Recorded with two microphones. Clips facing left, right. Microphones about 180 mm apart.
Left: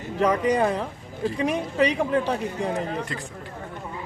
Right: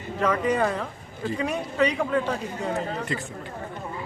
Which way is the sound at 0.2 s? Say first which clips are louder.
Left 2 dB; 15° left (ahead or behind).